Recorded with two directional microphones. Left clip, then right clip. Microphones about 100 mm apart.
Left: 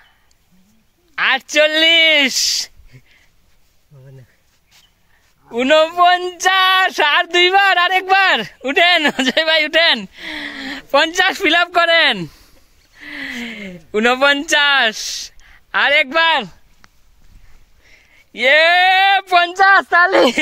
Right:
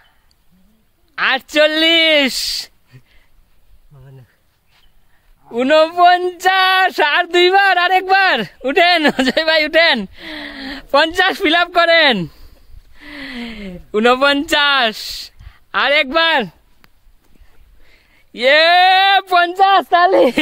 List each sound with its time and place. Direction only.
1.1 s speech: 50° right (ahead or behind)
3.9 s a sound: 10° left (ahead or behind)
5.5 s female singing: 50° right (ahead or behind)
17.8 s speech: 65° right (ahead or behind)
19.5 s speech: 35° right (ahead or behind)